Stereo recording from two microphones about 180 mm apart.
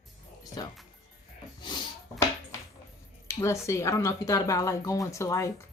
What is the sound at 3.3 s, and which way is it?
Speech, 15° left (ahead or behind).